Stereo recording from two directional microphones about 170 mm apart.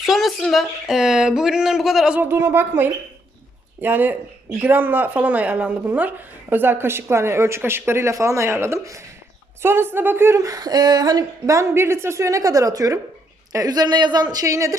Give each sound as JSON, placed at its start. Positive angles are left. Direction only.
{"t": 0.0, "sound": "speech", "side_deg": 0}